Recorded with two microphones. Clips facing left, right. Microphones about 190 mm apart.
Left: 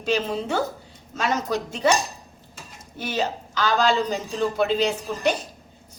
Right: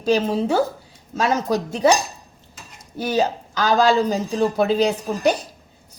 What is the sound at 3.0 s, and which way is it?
A woman's voice, 40° right (ahead or behind).